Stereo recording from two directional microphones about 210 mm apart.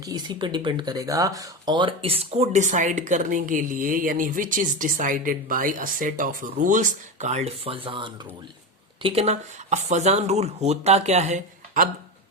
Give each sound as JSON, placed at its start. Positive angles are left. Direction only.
{"t": 0.0, "sound": "speech", "side_deg": -20}